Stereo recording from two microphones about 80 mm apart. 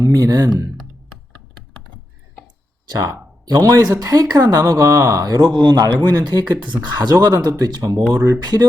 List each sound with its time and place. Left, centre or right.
0.0 s speech: right
2.9 s a man's voice: right